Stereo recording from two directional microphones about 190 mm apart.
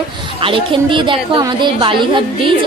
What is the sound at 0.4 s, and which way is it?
A woman's voice, 25° right (ahead or behind).